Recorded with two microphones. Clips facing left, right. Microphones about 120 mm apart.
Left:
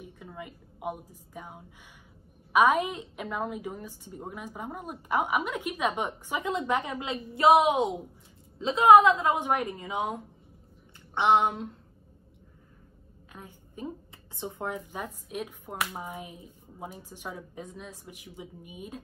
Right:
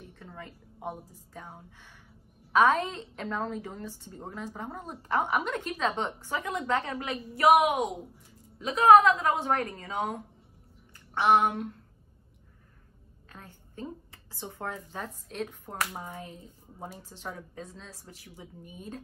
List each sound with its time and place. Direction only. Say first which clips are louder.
0.0 s a woman's voice: left 3 dB; 10° left (ahead or behind)
11.1 s a sound: even; 20° left (ahead or behind)
13.3 s a woman's voice: left 2 dB; 15° left (ahead or behind)